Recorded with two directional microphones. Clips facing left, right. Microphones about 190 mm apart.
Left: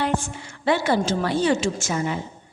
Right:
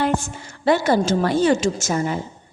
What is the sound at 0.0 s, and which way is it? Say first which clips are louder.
A woman's voice: right 3 dB; 45° right (ahead or behind).